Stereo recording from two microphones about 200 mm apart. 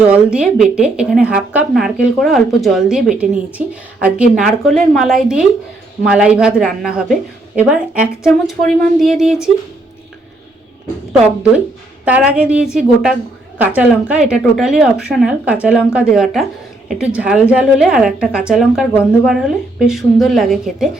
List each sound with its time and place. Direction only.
0.1 s a woman's voice: 5° right (ahead or behind)
12.0 s a woman's voice: 5° right (ahead or behind)